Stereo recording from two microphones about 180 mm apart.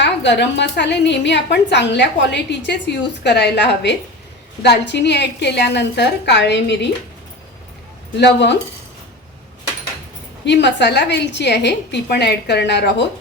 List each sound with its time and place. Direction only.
0.0 s a woman's voice: 70° left (ahead or behind)
8.1 s a woman's voice: 70° left (ahead or behind)
10.4 s a woman's voice: 75° left (ahead or behind)